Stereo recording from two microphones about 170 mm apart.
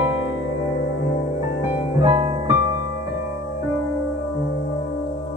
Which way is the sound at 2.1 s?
30° right (ahead or behind).